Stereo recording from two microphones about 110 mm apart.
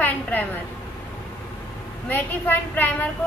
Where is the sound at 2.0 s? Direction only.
15° left (ahead or behind).